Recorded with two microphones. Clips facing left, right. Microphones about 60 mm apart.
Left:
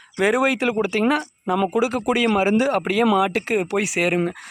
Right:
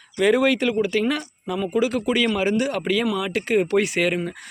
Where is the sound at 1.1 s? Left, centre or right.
Left.